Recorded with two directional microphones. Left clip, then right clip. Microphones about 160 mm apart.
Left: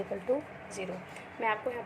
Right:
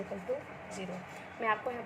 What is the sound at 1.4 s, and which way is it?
Speech, 20° left (ahead or behind).